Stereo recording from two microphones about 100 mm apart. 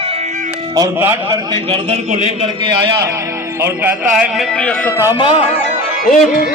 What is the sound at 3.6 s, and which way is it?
Speech, 20° right (ahead or behind).